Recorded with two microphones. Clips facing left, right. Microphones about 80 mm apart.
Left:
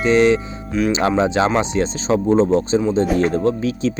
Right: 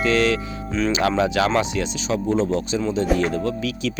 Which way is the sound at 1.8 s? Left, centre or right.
Left.